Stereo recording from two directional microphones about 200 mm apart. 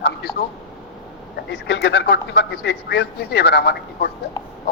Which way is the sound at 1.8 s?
60° left (ahead or behind).